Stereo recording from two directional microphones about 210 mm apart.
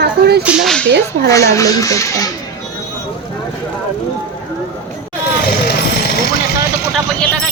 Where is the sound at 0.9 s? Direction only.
55° right (ahead or behind).